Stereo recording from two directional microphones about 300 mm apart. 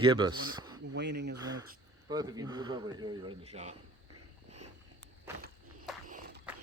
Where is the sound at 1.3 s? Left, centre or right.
Centre.